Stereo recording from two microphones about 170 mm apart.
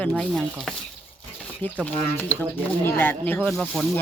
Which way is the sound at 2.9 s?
10° left (ahead or behind).